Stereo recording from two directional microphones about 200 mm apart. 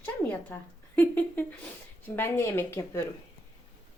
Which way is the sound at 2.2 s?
15° left (ahead or behind).